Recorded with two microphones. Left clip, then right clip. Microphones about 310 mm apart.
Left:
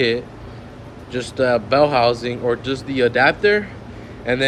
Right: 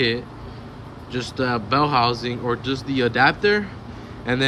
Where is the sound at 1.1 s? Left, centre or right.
Centre.